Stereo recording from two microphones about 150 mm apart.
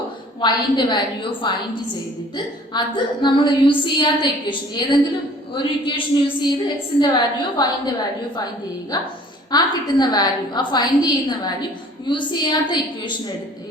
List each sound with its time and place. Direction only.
0.4 s a woman's voice: 30° left (ahead or behind)
9.5 s a woman's voice: 30° left (ahead or behind)